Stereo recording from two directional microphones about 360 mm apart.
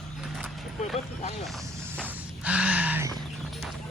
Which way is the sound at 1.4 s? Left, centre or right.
Centre.